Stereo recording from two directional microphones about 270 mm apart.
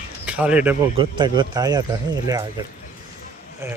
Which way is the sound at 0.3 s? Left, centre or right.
Centre.